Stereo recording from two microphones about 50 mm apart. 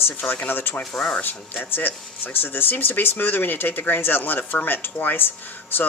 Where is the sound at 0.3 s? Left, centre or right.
Left.